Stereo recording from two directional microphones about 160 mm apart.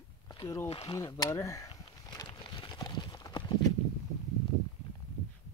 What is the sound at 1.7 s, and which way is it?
Clip-clop, 25° left (ahead or behind).